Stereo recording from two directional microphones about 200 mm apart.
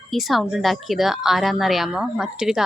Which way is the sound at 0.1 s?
Centre (ahead or behind).